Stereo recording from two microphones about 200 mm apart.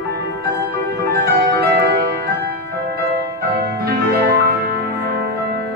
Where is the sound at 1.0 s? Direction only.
50° right (ahead or behind).